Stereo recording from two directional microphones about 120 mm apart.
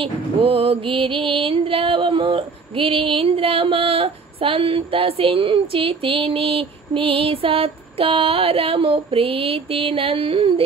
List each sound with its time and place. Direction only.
0.0 s music: 50° right (ahead or behind)